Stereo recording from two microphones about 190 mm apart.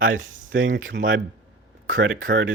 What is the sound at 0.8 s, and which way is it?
Speech, 90° right.